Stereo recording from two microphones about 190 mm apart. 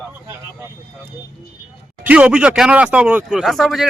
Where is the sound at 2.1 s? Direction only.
5° right (ahead or behind).